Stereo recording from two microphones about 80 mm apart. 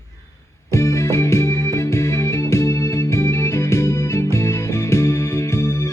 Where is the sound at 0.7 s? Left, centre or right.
Left.